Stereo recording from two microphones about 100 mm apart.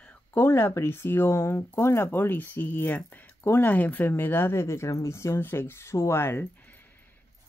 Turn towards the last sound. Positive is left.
turn(degrees=20)  # may be behind; listen again after turning